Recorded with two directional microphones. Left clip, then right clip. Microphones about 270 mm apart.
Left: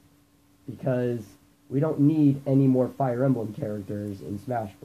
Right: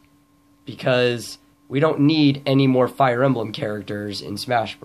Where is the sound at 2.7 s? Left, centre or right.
Right.